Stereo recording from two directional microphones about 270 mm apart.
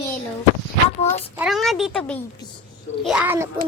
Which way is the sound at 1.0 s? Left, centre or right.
Left.